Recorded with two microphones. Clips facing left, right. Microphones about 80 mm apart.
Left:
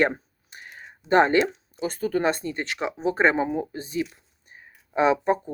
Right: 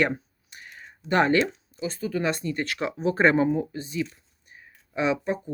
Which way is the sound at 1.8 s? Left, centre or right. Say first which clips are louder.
Left 3 dB; left.